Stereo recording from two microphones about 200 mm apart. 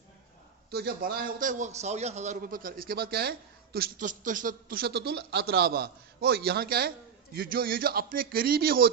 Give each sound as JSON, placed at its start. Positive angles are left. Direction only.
{"t": 0.7, "sound": "a man's voice", "side_deg": -50}